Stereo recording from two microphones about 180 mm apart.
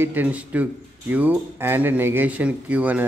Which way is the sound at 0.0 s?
10° right (ahead or behind).